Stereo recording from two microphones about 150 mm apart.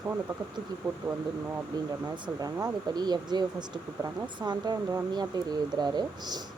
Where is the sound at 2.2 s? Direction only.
25° right (ahead or behind).